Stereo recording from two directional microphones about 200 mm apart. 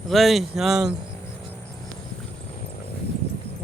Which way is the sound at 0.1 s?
Centre (ahead or behind).